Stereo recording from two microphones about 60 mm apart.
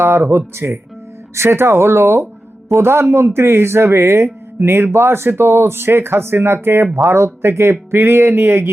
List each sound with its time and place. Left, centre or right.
0.0 s speech: right